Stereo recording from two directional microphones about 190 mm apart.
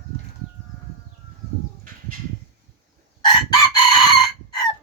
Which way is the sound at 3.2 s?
20° left (ahead or behind).